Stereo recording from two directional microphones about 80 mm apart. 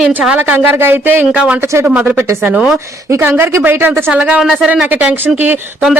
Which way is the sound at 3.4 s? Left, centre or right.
Right.